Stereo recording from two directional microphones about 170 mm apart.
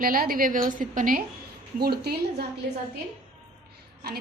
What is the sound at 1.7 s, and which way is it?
Speech, 65° right (ahead or behind).